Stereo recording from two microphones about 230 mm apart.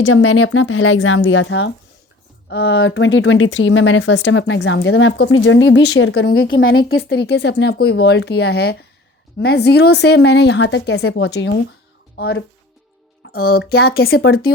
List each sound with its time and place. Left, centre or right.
0.0 s a woman's voice: left